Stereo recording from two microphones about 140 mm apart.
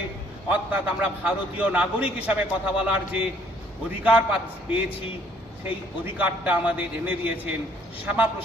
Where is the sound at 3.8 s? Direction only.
10° right (ahead or behind).